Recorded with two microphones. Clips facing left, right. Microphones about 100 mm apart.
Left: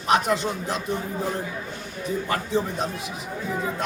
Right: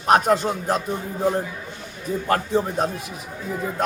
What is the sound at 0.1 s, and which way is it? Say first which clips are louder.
Speech: right 4 dB; 45° right (ahead or behind).